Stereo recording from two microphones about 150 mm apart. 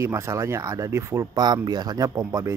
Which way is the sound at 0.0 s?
20° right (ahead or behind).